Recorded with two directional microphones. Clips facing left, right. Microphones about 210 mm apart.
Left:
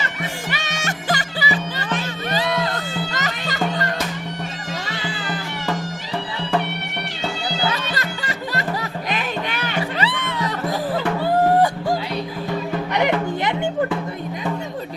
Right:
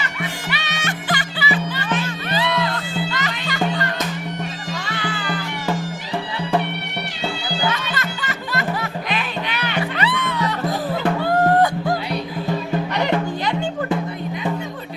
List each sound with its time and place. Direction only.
0.0 s music: 45° left (ahead or behind)
7.7 s music: 35° left (ahead or behind)
10.0 s music: 30° left (ahead or behind)
11.2 s music: 10° left (ahead or behind)
13.4 s music: 20° left (ahead or behind)